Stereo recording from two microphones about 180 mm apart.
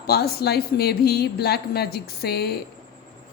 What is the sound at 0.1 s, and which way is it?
A woman's voice, 60° left (ahead or behind).